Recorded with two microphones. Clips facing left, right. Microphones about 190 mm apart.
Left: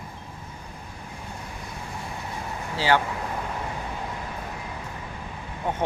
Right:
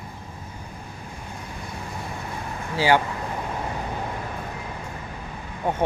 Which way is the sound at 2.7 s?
10° right (ahead or behind).